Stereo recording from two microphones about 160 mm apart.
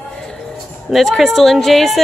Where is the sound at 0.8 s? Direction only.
Centre (ahead or behind).